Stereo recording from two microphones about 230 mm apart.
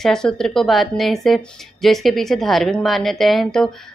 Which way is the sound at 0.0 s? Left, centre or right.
Centre.